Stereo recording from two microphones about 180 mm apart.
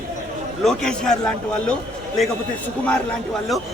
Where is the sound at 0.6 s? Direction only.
5° left (ahead or behind).